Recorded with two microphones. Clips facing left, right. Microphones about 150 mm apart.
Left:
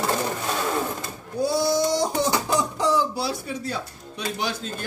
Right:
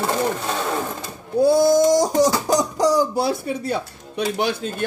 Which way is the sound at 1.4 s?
50° right (ahead or behind).